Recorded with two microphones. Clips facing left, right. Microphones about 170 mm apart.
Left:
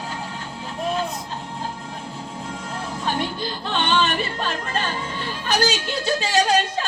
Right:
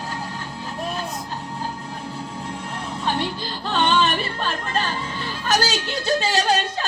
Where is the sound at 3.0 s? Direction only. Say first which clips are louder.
Right 1 dB; 35° right (ahead or behind).